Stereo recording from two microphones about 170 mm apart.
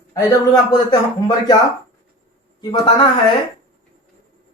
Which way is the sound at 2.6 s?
30° left (ahead or behind).